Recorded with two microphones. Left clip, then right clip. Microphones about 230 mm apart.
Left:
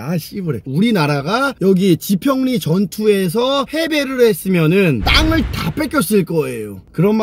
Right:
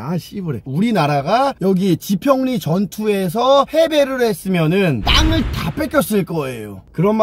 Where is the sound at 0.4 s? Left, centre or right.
Centre.